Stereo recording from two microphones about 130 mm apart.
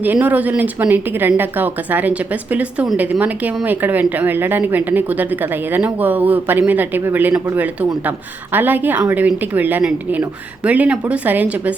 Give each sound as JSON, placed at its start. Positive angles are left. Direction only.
{"t": 0.0, "sound": "speech", "side_deg": -15}